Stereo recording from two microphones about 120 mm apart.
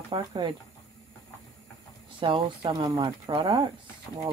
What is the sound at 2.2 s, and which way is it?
Speech, 45° right (ahead or behind).